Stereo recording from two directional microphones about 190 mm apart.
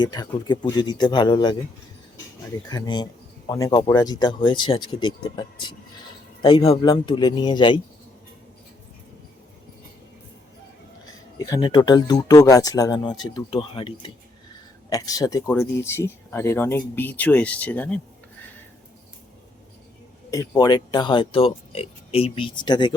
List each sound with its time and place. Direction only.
0.0 s speech: 20° left (ahead or behind)
2.6 s speech: 20° left (ahead or behind)
11.0 s speech: 20° left (ahead or behind)
20.3 s speech: 15° left (ahead or behind)